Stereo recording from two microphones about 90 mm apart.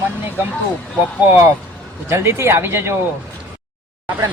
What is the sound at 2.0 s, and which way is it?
Speech, 30° right (ahead or behind).